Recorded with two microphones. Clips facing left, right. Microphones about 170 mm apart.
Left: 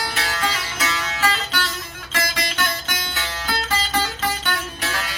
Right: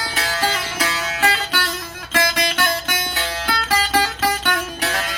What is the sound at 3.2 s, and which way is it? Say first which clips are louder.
Music: even; 50° right (ahead or behind).